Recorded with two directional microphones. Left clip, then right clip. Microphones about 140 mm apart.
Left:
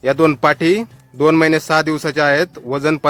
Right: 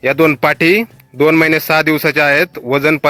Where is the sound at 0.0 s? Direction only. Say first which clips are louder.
Right 2 dB; 25° right (ahead or behind).